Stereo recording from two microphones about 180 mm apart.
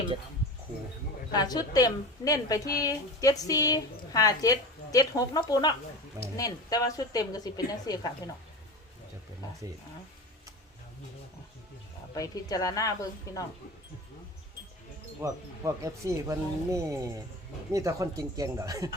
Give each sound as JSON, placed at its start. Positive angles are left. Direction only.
{"t": 1.3, "sound": "a woman's voice", "side_deg": 20}
{"t": 12.1, "sound": "a woman's voice", "side_deg": 20}
{"t": 15.2, "sound": "speech", "side_deg": -15}